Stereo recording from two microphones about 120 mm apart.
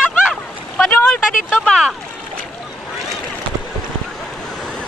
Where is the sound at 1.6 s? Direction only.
Centre (ahead or behind).